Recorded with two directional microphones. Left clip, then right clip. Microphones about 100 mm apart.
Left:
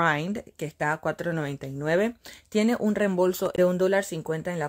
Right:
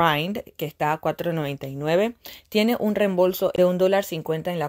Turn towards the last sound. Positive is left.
turn(degrees=-25)  # may be behind; listen again after turning